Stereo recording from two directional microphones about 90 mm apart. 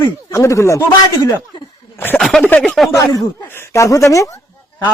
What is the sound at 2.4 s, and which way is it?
Speech, 20° left (ahead or behind).